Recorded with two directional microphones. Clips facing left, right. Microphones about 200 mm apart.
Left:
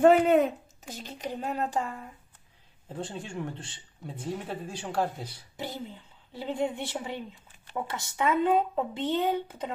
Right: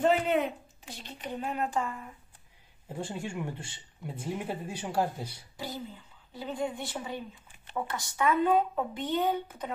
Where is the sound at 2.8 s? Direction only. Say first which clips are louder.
Right 1 dB; 10° right (ahead or behind).